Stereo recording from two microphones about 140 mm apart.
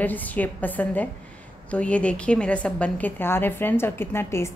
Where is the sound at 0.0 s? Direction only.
10° left (ahead or behind).